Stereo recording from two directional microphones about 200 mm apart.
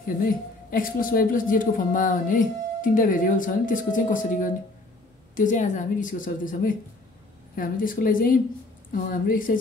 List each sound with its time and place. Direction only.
0.0 s a woman's voice: 45° left (ahead or behind)